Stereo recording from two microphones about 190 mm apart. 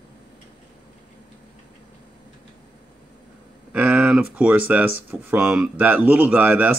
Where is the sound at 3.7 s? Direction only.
5° right (ahead or behind).